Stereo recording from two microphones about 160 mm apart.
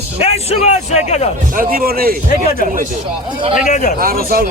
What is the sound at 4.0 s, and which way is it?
Speech, 65° right (ahead or behind).